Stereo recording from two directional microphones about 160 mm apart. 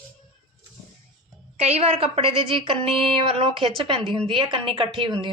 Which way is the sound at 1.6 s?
40° right (ahead or behind).